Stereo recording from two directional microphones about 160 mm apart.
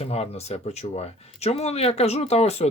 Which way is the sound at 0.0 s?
40° left (ahead or behind).